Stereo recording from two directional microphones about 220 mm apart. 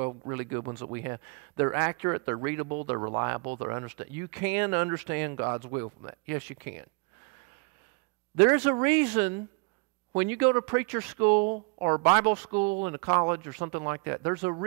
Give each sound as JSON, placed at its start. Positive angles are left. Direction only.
{"t": 0.3, "sound": "speech", "side_deg": -15}
{"t": 8.4, "sound": "speech", "side_deg": -15}